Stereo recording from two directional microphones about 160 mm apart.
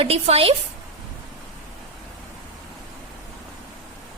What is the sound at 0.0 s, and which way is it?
Speech, 35° right (ahead or behind).